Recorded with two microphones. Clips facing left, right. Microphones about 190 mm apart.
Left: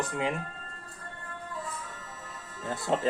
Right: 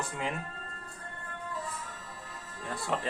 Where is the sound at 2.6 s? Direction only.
20° left (ahead or behind).